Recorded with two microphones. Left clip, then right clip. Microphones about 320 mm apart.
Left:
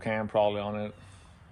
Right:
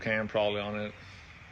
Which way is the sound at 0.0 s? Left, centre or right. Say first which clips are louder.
Left 2 dB; left.